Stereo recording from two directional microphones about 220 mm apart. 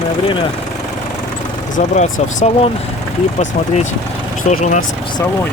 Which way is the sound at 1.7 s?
30° left (ahead or behind).